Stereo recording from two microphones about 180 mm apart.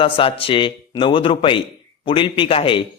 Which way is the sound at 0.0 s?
30° left (ahead or behind).